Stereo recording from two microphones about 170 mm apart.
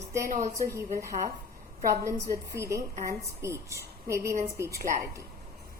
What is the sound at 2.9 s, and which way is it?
Speech, 45° right (ahead or behind).